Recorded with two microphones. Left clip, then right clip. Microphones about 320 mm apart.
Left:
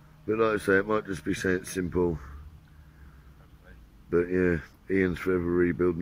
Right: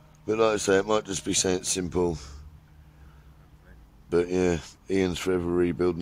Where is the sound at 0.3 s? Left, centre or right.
Centre.